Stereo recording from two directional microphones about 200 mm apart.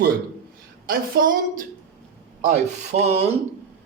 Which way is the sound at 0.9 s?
45° right (ahead or behind).